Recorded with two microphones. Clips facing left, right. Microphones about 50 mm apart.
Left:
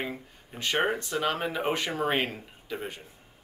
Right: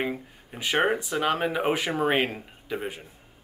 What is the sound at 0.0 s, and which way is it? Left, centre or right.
Speech, centre.